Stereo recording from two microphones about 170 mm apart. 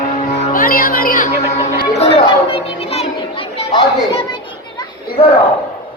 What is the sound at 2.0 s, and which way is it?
Chatter, 35° left (ahead or behind).